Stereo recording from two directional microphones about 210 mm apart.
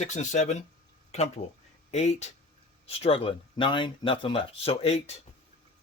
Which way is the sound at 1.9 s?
30° left (ahead or behind).